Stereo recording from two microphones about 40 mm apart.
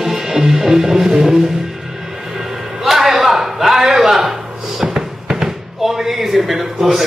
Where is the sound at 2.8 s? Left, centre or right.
Centre.